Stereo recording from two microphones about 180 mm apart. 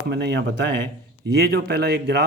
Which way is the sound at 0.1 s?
75° right (ahead or behind).